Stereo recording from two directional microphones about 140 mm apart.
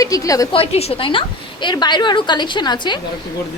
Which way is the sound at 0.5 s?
45° left (ahead or behind).